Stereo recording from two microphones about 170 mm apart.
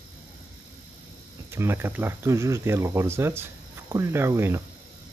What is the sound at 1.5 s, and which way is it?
Speech, 15° right (ahead or behind).